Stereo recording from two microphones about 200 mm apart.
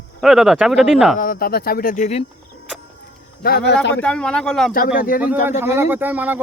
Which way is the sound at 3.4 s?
55° left (ahead or behind).